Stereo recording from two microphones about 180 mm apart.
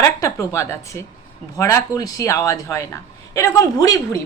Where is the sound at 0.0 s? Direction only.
15° left (ahead or behind).